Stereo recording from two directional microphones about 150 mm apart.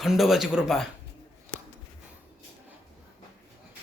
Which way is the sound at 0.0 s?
Centre (ahead or behind).